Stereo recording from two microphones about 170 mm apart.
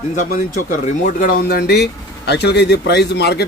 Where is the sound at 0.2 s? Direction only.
55° left (ahead or behind).